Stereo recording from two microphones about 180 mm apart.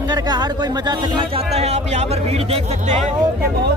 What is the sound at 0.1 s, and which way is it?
Speech, 20° right (ahead or behind).